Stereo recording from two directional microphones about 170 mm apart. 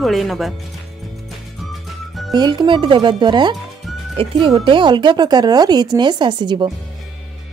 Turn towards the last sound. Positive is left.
turn(degrees=-25)  # may be behind; listen again after turning